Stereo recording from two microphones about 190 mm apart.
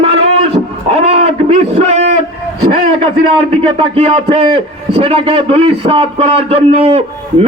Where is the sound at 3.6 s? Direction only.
30° right (ahead or behind).